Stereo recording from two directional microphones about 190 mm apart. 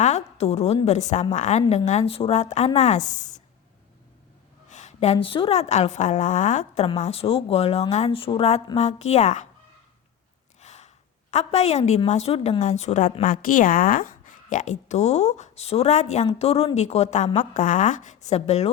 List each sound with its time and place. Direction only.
0.0 s a woman's voice: 35° left (ahead or behind)
4.7 s a woman's voice: 40° left (ahead or behind)
10.6 s a woman's voice: 35° left (ahead or behind)